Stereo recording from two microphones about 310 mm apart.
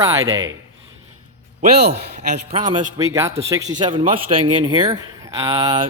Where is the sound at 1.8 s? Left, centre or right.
Right.